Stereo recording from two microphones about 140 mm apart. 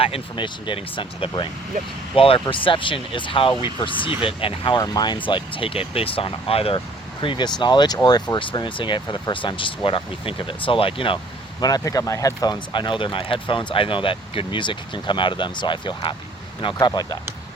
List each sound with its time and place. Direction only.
0.0 s speech: 35° left (ahead or behind)
11.6 s speech: 25° left (ahead or behind)